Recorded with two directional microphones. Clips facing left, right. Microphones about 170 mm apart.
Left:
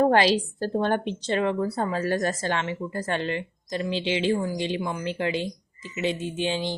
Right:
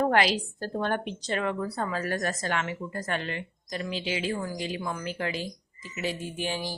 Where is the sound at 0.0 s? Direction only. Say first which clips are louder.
Left 4 dB; 30° left (ahead or behind).